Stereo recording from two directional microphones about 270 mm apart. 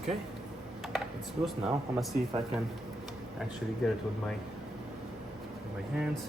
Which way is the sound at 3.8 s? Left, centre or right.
Centre.